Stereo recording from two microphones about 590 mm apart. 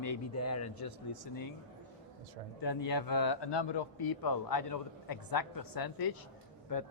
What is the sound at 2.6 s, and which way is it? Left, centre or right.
A man's voice, left.